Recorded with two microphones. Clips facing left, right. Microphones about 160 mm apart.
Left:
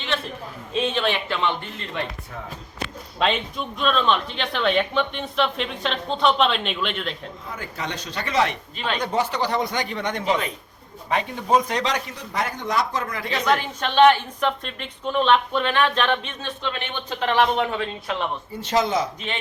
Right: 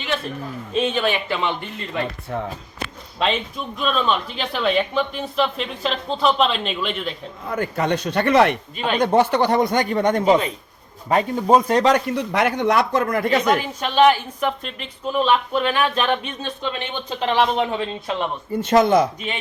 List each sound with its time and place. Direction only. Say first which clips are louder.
0.7 s speech: right 2 dB; centre (ahead or behind)
3.2 s speech: right 1 dB; centre (ahead or behind)
7.5 s speech: right 11 dB; 55° right (ahead or behind)
8.7 s a woman's voice: right 4 dB; 15° right (ahead or behind)
9.0 s a man's voice: right 8 dB; 55° right (ahead or behind)
13.6 s a woman's voice: even; 10° right (ahead or behind)
17.2 s speech: right 1 dB; 25° right (ahead or behind)
18.6 s speech: right 7 dB; 55° right (ahead or behind)